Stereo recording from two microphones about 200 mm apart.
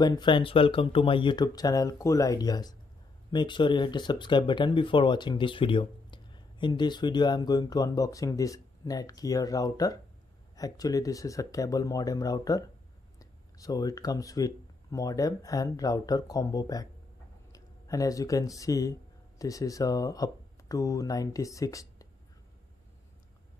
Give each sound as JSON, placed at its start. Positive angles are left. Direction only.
{"t": 0.0, "sound": "speech", "side_deg": 20}